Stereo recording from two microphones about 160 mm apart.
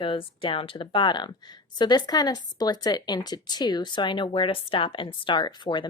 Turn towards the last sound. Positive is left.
turn(degrees=30)  # may be behind; listen again after turning